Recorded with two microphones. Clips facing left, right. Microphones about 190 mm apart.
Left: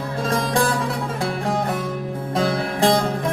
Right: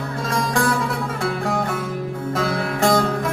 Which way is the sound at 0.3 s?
35° left (ahead or behind).